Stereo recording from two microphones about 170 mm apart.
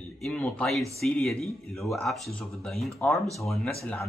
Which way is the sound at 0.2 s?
Centre (ahead or behind).